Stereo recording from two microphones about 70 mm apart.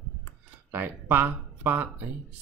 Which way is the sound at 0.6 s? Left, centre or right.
Right.